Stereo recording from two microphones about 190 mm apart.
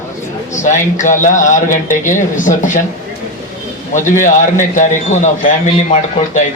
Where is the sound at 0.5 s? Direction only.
40° left (ahead or behind).